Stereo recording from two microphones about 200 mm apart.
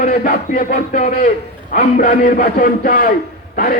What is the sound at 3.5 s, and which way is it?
Speech, 45° left (ahead or behind).